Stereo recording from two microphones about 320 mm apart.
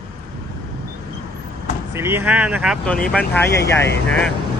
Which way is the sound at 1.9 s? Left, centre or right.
Centre.